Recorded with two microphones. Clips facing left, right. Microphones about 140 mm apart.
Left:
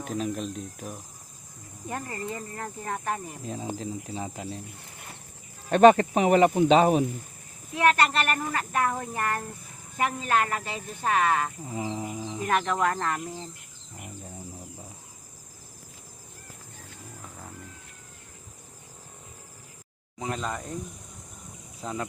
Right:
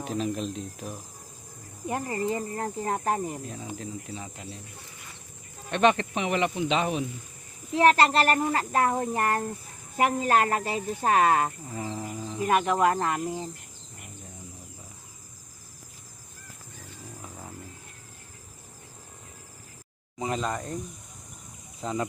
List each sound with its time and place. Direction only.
0.0 s speech: centre (ahead or behind)
1.9 s speech: 25° right (ahead or behind)
3.4 s speech: 30° left (ahead or behind)
5.7 s speech: 40° left (ahead or behind)
7.8 s speech: 30° right (ahead or behind)
11.7 s insect: 15° left (ahead or behind)
12.4 s cricket: 10° right (ahead or behind)
17.2 s a sound: 5° right (ahead or behind)
20.1 s speech: 5° right (ahead or behind)
21.8 s speech: centre (ahead or behind)